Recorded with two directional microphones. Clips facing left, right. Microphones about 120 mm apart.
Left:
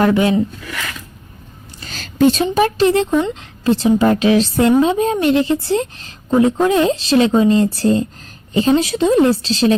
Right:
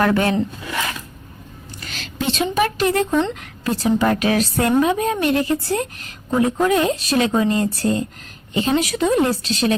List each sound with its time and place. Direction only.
0.0 s speech: 15° left (ahead or behind)
1.8 s a sound: 35° left (ahead or behind)
2.4 s a woman's voice: 30° left (ahead or behind)
3.1 s a woman's voice: 5° left (ahead or behind)
3.6 s a woman's voice: 25° left (ahead or behind)